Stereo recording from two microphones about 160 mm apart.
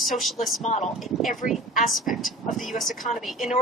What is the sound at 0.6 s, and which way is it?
Speech, 45° left (ahead or behind).